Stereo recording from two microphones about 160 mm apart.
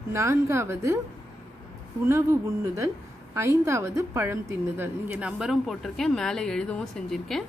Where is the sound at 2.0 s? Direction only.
20° right (ahead or behind).